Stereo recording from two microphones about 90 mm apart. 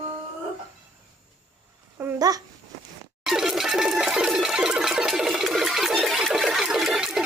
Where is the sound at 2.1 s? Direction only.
45° right (ahead or behind).